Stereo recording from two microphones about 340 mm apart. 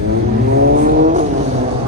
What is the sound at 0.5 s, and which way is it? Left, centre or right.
Vehicle, right.